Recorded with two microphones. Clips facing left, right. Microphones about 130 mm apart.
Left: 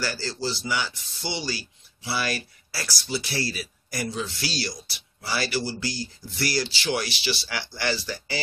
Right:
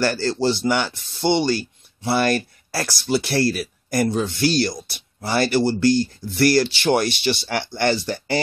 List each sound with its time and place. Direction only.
0.0 s speech: 60° right (ahead or behind)